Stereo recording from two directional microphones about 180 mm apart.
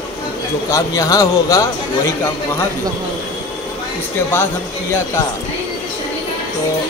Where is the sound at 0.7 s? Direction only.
20° left (ahead or behind).